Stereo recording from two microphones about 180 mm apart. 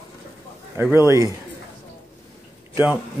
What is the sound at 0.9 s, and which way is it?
Speech, 15° right (ahead or behind).